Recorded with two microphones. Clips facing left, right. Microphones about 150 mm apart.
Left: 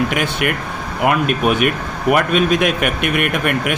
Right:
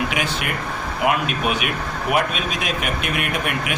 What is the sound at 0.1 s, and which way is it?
Speech, 55° left (ahead or behind).